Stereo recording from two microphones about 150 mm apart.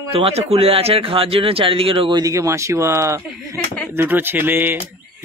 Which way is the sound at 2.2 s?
20° right (ahead or behind).